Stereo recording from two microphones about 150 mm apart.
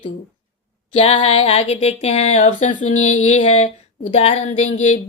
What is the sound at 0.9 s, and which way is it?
A woman's voice, 35° left (ahead or behind).